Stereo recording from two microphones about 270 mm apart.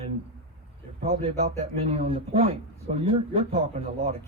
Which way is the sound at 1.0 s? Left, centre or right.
Right.